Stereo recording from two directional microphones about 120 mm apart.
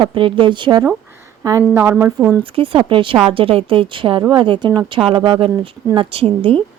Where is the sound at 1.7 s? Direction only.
15° right (ahead or behind).